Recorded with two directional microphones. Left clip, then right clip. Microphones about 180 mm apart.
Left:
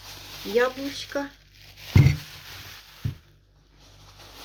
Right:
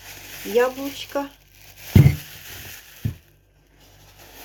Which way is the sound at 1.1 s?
50° right (ahead or behind).